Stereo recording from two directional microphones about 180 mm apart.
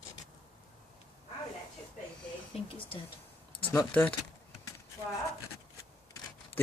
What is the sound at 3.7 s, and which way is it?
Speech, 10° left (ahead or behind).